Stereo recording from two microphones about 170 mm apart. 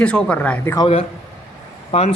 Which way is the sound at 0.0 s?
5° left (ahead or behind).